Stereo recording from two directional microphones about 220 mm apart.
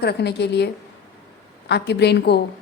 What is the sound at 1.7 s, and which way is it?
Speech, 50° left (ahead or behind).